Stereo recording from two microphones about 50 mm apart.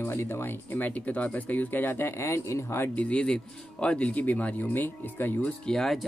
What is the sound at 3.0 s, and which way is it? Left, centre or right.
Speech, left.